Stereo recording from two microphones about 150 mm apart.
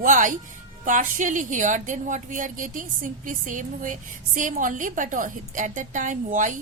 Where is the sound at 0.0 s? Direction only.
60° right (ahead or behind).